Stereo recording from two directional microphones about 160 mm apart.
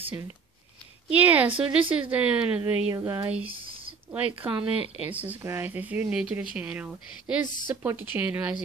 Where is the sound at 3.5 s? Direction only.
35° right (ahead or behind).